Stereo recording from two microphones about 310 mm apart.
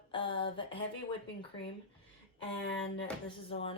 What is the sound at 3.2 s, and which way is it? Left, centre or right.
Speech, centre.